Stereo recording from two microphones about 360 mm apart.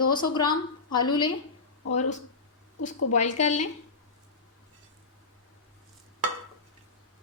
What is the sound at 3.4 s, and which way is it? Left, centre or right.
Speech, centre.